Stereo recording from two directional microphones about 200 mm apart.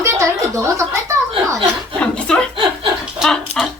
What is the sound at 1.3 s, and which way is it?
Chuckle, 25° right (ahead or behind).